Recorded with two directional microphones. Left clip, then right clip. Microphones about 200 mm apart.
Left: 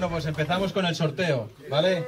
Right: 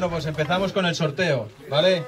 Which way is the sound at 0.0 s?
5° left (ahead or behind).